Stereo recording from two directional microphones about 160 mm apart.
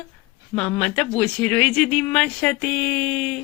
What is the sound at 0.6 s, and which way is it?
A woman's voice, 10° left (ahead or behind).